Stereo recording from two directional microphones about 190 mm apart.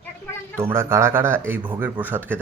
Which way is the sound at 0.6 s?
15° right (ahead or behind).